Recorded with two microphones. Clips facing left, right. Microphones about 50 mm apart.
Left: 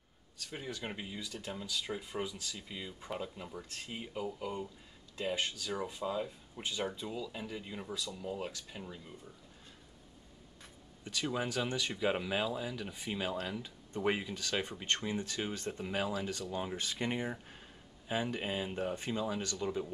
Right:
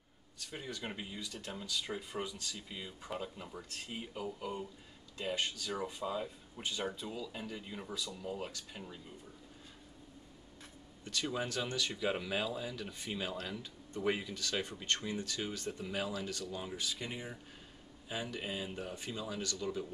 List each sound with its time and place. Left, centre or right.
0.4 s speech: centre
11.1 s speech: centre
16.7 s speech: left
18.0 s speech: left